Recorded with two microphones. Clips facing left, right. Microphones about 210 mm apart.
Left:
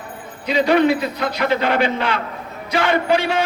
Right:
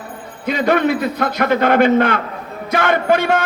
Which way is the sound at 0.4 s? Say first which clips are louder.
Left 1 dB; 50° right (ahead or behind).